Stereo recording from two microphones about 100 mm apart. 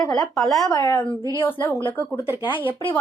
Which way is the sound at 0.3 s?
Centre (ahead or behind).